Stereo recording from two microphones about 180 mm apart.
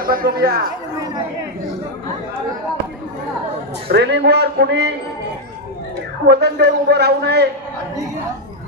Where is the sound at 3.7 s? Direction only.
70° right (ahead or behind).